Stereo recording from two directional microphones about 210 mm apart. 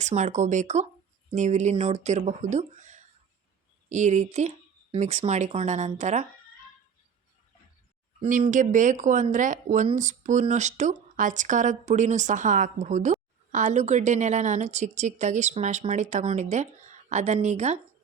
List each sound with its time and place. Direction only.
0.0 s speech: 35° right (ahead or behind)
8.2 s speech: 40° right (ahead or behind)